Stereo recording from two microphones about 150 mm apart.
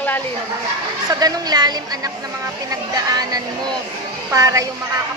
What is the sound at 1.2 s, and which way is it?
Speech, 25° right (ahead or behind).